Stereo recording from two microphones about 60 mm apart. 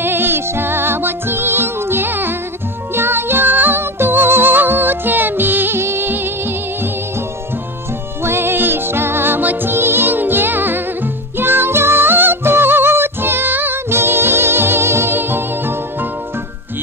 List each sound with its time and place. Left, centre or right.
0.0 s music: right
8.2 s music: right